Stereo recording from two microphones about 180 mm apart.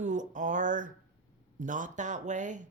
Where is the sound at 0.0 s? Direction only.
45° right (ahead or behind).